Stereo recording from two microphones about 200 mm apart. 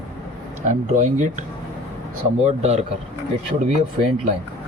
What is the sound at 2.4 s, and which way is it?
Speech, 35° right (ahead or behind).